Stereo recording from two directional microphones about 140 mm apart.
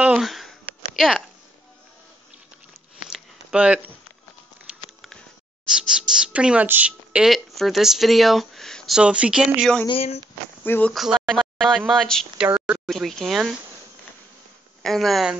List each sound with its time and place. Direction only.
0.2 s a sound: centre (ahead or behind)
3.1 s a sound: 10° right (ahead or behind)
4.6 s patter: centre (ahead or behind)
5.7 s speech: 5° right (ahead or behind)
9.8 s speech: 45° left (ahead or behind)
10.6 s speech: 15° left (ahead or behind)
10.9 s speech: centre (ahead or behind)
14.8 s speech: centre (ahead or behind)